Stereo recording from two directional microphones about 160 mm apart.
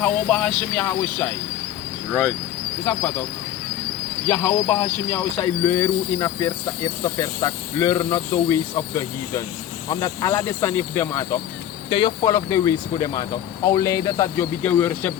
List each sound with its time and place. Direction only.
0.0 s speech: 5° left (ahead or behind)
2.8 s speech: 10° left (ahead or behind)
4.3 s speech: 15° left (ahead or behind)
11.9 s speech: 30° left (ahead or behind)